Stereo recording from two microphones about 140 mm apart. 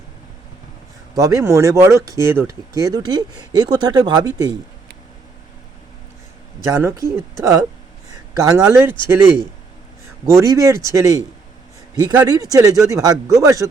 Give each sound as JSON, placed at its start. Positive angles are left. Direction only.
{"t": 1.1, "sound": "speech", "side_deg": -25}
{"t": 6.7, "sound": "speech", "side_deg": -20}